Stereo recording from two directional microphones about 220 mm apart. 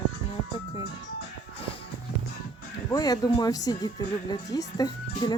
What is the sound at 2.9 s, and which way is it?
Speech, 20° left (ahead or behind).